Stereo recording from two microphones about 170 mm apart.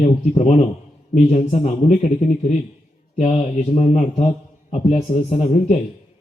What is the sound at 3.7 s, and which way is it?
A man's voice, 40° left (ahead or behind).